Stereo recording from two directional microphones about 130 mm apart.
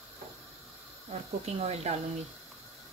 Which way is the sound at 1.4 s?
55° right (ahead or behind).